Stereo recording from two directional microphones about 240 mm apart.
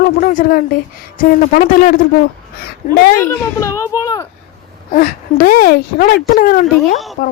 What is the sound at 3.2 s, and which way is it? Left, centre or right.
A child's voice, centre.